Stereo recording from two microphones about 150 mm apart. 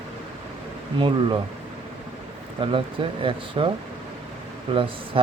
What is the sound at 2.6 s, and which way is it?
Speech, 35° right (ahead or behind).